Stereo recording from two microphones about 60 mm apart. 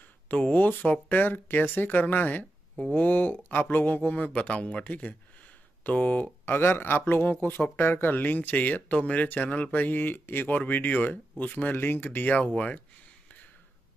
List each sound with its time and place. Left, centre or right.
0.0 s speech: left
6.4 s speech: left